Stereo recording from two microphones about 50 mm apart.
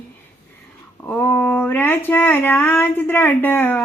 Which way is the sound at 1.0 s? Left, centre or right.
Left.